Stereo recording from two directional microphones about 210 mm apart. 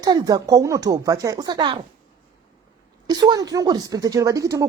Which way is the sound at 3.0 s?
20° right (ahead or behind).